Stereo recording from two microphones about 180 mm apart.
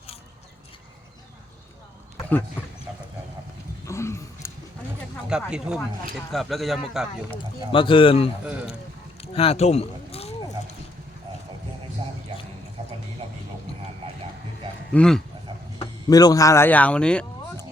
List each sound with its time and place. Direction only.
3.8 s a sound: 15° left (ahead or behind)
5.3 s speech: 5° right (ahead or behind)
7.7 s speech: 30° left (ahead or behind)
9.2 s a sound: 35° left (ahead or behind)
13.2 s music: 35° right (ahead or behind)
14.9 s speech: 5° left (ahead or behind)
16.0 s speech: 20° left (ahead or behind)